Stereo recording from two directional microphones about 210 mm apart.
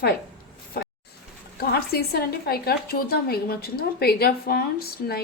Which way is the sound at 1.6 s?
50° left (ahead or behind).